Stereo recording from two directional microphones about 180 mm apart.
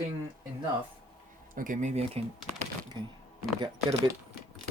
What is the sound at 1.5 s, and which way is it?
Speech, 45° right (ahead or behind).